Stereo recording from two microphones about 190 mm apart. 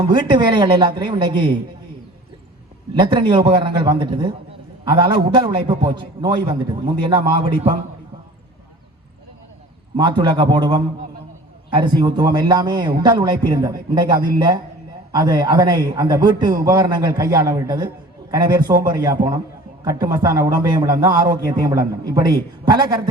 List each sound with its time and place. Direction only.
0.0 s a man's voice: 25° right (ahead or behind)
2.9 s a man's voice: 25° right (ahead or behind)
10.0 s a man's voice: 25° right (ahead or behind)